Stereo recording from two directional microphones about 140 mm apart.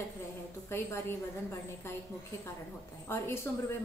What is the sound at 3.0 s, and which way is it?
Speech, 15° left (ahead or behind).